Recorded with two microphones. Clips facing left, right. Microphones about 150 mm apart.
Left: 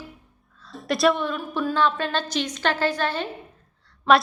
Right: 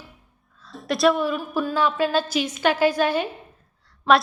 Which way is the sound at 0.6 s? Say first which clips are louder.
Right 1 dB; centre (ahead or behind).